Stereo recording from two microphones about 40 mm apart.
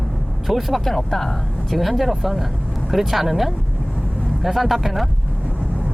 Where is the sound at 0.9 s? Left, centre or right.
Centre.